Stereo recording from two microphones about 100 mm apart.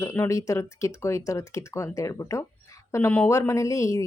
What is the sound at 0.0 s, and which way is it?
Speech, 30° left (ahead or behind).